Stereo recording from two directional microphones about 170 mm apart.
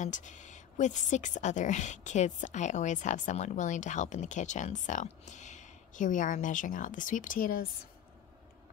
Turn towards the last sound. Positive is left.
turn(degrees=60)  # may be behind; listen again after turning